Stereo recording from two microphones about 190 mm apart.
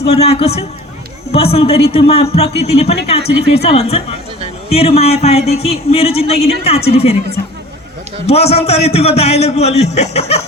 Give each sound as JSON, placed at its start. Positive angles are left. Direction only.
{"t": 0.0, "sound": "a man's voice", "side_deg": 30}